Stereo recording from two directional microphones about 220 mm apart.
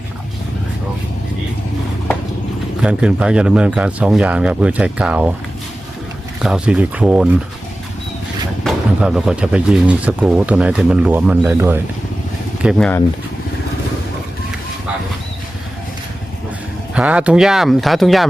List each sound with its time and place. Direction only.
2.8 s speech: 5° right (ahead or behind)
6.4 s speech: 5° right (ahead or behind)
8.6 s speech: 5° right (ahead or behind)
12.6 s speech: 5° left (ahead or behind)
16.9 s speech: 5° right (ahead or behind)